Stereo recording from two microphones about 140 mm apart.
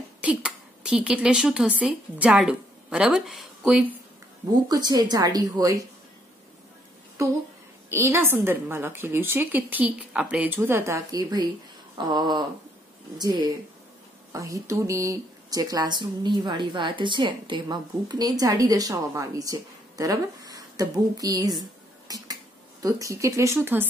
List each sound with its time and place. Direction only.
0.2 s a woman's voice: 10° right (ahead or behind)
4.6 s a woman's voice: 30° right (ahead or behind)
7.2 s a woman's voice: 20° right (ahead or behind)
12.0 s a sound: 30° right (ahead or behind)
14.3 s speech: 25° right (ahead or behind)